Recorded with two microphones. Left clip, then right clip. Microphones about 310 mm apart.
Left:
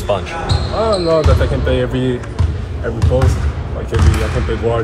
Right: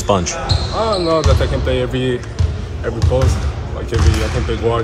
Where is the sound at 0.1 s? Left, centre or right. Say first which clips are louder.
Right 2 dB; right.